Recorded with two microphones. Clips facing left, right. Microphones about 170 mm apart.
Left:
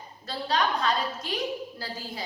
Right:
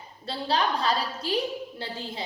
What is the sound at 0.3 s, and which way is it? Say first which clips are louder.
A woman's voice: right 1 dB; 30° right (ahead or behind).